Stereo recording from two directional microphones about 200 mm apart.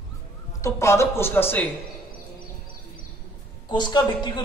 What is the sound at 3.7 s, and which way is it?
Speech, 20° left (ahead or behind).